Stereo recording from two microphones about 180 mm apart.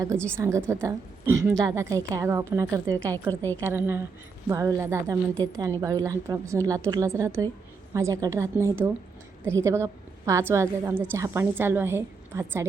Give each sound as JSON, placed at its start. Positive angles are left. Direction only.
{"t": 0.3, "sound": "a woman's voice", "side_deg": -15}